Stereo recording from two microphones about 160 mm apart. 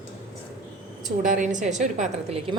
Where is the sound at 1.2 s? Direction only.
55° right (ahead or behind).